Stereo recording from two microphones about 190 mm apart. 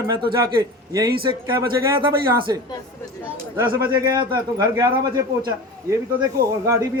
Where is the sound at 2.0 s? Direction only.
25° right (ahead or behind).